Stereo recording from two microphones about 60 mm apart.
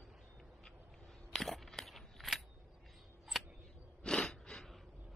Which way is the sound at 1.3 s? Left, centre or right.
Centre.